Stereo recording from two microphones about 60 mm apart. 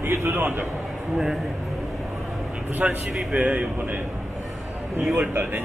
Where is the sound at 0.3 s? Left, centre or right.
Right.